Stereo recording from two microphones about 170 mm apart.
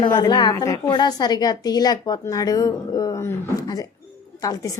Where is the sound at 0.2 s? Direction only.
25° left (ahead or behind).